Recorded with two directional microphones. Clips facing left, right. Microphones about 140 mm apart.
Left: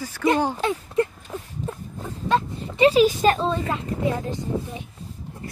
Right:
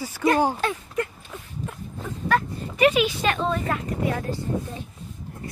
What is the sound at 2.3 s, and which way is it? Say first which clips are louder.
Speech: left 1 dB; 30° left (ahead or behind).